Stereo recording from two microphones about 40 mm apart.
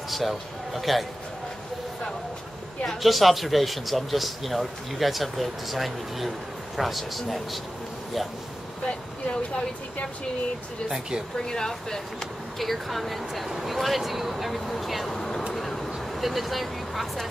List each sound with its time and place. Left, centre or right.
0.1 s speech: centre
3.0 s speech: centre
8.8 s speech: left
11.3 s speech: centre
12.5 s speech: centre
15.1 s a sound: centre
15.5 s vehicle: centre
16.2 s speech: centre